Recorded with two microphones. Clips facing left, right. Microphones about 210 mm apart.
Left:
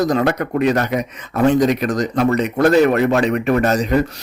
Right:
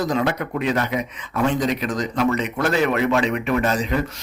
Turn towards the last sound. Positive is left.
turn(degrees=40)  # may be behind; listen again after turning